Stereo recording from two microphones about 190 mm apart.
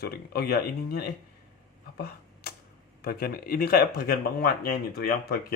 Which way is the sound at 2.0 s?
55° left (ahead or behind).